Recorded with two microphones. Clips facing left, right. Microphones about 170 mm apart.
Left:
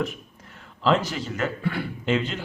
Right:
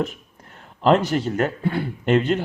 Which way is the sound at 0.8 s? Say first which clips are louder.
Right 5 dB; 55° right (ahead or behind).